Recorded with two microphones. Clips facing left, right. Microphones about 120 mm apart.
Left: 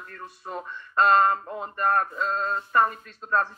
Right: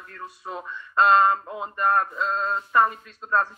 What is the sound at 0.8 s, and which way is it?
Speech, 45° left (ahead or behind).